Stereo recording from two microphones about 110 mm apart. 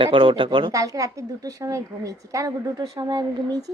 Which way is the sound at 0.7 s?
30° right (ahead or behind).